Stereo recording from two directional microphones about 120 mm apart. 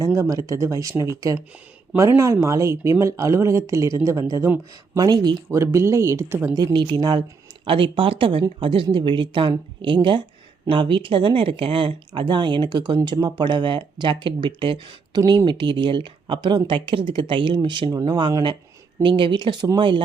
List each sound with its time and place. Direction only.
0.0 s speech: 25° right (ahead or behind)
5.5 s speech: 25° right (ahead or behind)
6.6 s speech: 35° right (ahead or behind)